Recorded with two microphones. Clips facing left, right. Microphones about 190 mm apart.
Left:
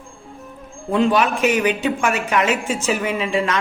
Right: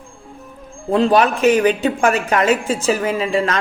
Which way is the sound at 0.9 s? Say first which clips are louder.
Right 3 dB; 35° right (ahead or behind).